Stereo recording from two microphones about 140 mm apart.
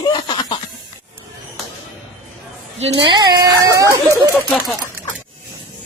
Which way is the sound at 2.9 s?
30° right (ahead or behind).